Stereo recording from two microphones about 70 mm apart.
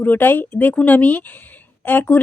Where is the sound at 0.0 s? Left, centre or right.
Left.